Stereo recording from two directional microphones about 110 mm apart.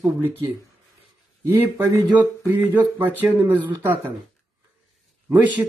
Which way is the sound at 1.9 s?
20° right (ahead or behind).